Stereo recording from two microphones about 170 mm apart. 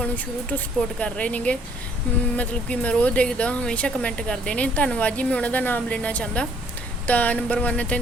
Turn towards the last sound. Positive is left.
turn(degrees=10)  # may be behind; listen again after turning